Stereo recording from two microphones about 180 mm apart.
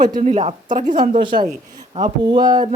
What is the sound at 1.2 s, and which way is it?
Speech, 25° right (ahead or behind).